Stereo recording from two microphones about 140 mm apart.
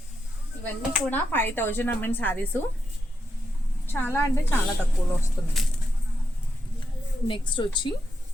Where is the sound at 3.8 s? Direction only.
15° left (ahead or behind).